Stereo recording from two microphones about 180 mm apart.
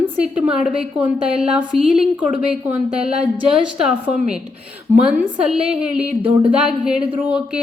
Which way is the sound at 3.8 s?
5° right (ahead or behind).